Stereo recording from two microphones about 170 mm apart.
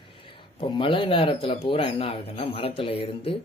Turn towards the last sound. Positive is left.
turn(degrees=35)  # may be behind; listen again after turning